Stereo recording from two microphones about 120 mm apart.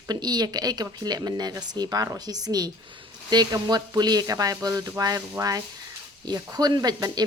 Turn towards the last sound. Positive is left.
turn(degrees=-35)  # may be behind; listen again after turning